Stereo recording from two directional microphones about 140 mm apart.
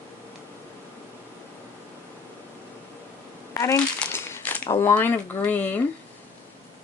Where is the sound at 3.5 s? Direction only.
25° left (ahead or behind).